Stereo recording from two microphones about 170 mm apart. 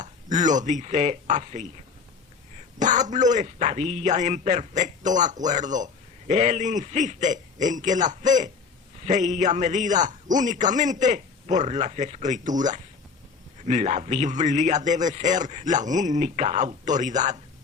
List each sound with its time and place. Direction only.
0.0 s speech: 45° right (ahead or behind)
2.7 s a man's voice: 45° right (ahead or behind)